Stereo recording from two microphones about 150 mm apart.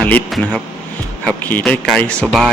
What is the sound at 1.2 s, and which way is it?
Speech, 10° left (ahead or behind).